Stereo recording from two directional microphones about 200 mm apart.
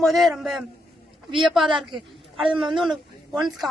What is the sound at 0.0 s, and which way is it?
A woman's voice, centre (ahead or behind).